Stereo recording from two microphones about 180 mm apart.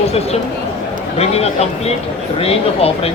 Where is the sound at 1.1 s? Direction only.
35° left (ahead or behind).